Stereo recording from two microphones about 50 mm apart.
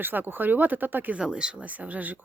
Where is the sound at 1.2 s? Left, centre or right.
Centre.